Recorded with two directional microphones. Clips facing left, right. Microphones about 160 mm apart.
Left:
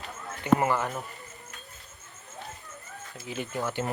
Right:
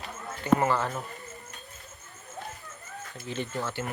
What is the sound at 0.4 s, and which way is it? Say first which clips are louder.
Speech: even; 15° left (ahead or behind).